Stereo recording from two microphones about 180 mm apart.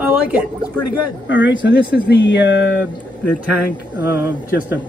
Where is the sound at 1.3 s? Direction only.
90° left.